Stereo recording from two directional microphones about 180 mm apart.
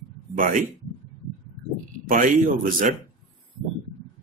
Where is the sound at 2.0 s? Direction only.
50° right (ahead or behind).